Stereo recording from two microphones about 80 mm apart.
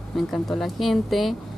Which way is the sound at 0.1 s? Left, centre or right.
Centre.